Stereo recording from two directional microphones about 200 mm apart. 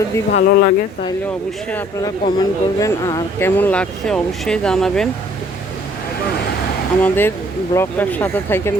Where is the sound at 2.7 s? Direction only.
15° left (ahead or behind).